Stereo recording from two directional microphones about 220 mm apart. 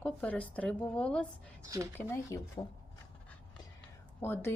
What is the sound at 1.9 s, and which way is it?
Speech, 10° left (ahead or behind).